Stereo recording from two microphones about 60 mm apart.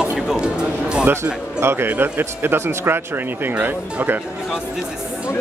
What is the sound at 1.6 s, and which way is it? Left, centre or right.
A man's voice, right.